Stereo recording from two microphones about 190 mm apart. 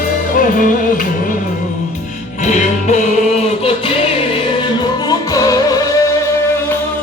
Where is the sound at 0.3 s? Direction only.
45° left (ahead or behind).